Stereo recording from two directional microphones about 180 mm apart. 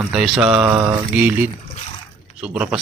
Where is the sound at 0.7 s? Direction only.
15° right (ahead or behind).